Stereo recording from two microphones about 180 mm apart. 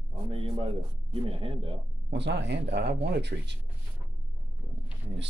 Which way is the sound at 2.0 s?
75° right (ahead or behind).